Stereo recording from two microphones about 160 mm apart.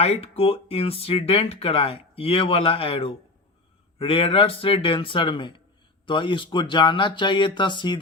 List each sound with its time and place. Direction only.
0.0 s speech: 40° left (ahead or behind)